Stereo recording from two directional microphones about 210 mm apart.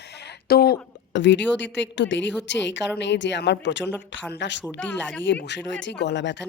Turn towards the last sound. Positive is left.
turn(degrees=60)  # may be behind; listen again after turning